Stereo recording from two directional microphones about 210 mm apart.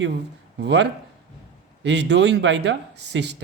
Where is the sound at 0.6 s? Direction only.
55° right (ahead or behind).